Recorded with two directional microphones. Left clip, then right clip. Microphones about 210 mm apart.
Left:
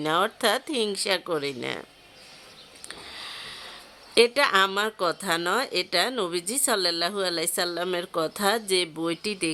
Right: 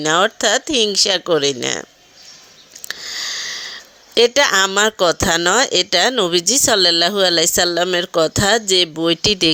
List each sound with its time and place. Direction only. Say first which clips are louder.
0.0 s speech: right 8 dB; 20° right (ahead or behind)